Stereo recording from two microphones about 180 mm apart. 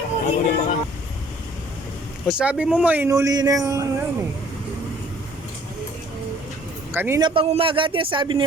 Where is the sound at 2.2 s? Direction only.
5° right (ahead or behind).